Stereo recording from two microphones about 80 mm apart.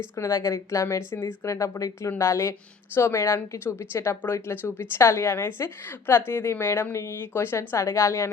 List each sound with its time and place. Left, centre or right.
0.2 s a woman's voice: left